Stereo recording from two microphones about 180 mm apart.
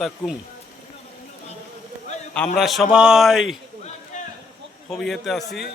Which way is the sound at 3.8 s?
40° left (ahead or behind).